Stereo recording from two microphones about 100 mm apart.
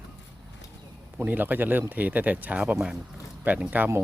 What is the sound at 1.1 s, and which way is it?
Speech, 15° right (ahead or behind).